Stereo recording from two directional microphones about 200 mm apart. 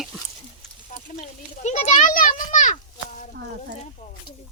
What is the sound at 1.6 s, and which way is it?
Children playing, 35° left (ahead or behind).